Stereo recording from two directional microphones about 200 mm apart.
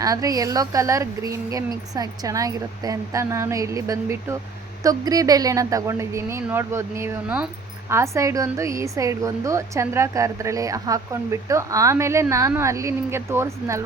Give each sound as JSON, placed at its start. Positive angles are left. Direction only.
{"t": 0.0, "sound": "a woman's voice", "side_deg": -20}